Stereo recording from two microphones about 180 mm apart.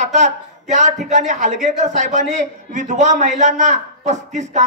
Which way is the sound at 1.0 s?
45° right (ahead or behind).